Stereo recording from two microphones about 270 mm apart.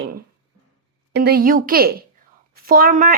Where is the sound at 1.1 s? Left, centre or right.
Right.